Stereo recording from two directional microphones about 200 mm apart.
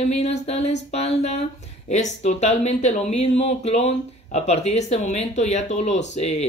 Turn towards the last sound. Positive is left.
turn(degrees=35)  # may be behind; listen again after turning